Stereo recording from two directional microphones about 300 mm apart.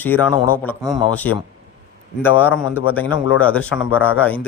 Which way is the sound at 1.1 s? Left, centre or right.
Centre.